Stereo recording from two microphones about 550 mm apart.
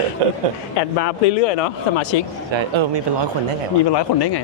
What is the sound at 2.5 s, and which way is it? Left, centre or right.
Speech, right.